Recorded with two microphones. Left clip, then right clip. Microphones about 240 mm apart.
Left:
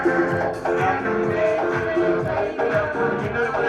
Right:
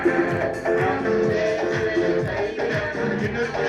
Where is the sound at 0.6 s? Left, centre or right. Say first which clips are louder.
Even; left.